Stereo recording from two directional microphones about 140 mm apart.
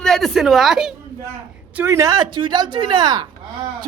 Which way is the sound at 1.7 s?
15° right (ahead or behind).